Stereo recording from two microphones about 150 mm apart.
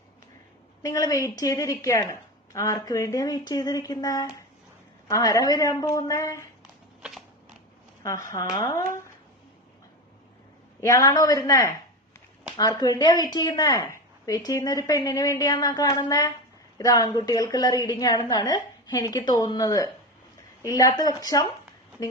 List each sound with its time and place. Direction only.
0.8 s speech: 25° left (ahead or behind)
8.0 s speech: 20° left (ahead or behind)
10.8 s speech: 20° left (ahead or behind)